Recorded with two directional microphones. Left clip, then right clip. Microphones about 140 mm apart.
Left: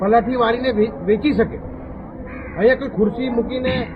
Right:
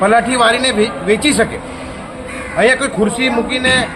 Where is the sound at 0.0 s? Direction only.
60° right (ahead or behind).